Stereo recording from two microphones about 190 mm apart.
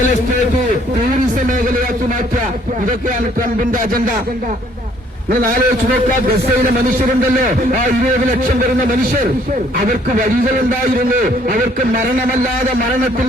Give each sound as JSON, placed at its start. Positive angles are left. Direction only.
{"t": 3.7, "sound": "speech", "side_deg": -45}
{"t": 5.3, "sound": "speech", "side_deg": -50}
{"t": 6.7, "sound": "speech", "side_deg": -45}
{"t": 9.7, "sound": "speech", "side_deg": -45}